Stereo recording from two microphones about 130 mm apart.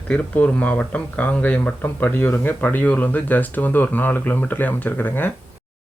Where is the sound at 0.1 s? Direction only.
10° left (ahead or behind).